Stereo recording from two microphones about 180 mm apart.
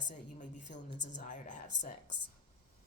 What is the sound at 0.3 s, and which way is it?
A woman's voice, 45° left (ahead or behind).